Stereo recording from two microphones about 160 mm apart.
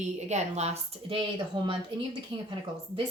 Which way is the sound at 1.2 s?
30° right (ahead or behind).